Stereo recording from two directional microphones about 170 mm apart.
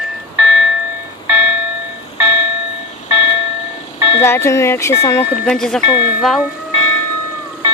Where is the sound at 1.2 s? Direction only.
10° right (ahead or behind).